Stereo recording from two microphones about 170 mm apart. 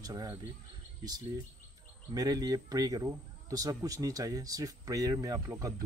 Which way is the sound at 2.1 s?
20° right (ahead or behind).